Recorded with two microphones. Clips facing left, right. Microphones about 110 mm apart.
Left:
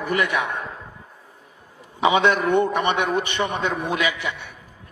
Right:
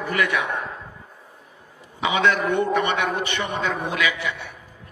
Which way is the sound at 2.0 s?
20° left (ahead or behind).